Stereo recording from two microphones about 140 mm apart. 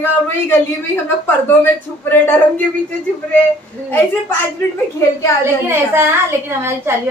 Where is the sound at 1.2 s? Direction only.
15° left (ahead or behind).